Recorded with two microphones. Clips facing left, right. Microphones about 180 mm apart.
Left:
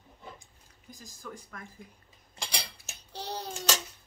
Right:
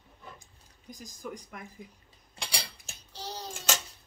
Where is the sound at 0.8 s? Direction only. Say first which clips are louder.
Right 4 dB; 15° right (ahead or behind).